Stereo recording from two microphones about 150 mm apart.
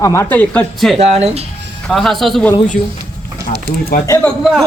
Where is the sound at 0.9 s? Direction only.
45° right (ahead or behind).